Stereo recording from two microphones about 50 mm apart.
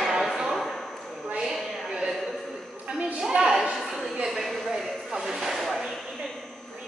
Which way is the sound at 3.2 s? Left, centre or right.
Centre.